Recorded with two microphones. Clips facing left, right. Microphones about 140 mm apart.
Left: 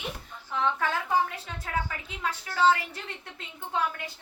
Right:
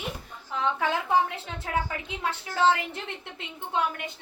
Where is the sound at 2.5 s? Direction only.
20° right (ahead or behind).